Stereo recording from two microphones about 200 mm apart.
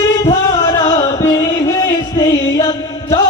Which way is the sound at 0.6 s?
15° left (ahead or behind).